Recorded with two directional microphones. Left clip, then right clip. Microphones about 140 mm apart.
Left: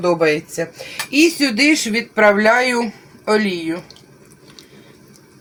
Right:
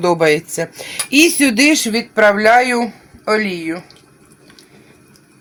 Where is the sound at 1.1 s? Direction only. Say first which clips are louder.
Right 3 dB; 90° right.